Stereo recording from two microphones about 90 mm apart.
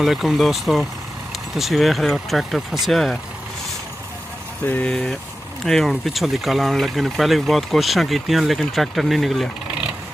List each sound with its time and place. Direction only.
0.0 s speech: 5° right (ahead or behind)
4.6 s speech: 20° left (ahead or behind)
5.7 s speech: 5° left (ahead or behind)